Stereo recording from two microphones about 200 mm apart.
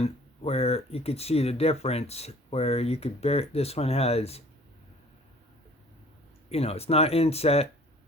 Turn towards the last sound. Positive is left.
turn(degrees=30)  # may be behind; listen again after turning